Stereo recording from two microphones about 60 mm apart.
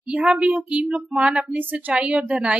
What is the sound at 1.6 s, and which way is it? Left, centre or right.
Speech, right.